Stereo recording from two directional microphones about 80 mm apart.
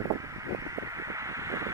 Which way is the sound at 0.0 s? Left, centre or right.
Right.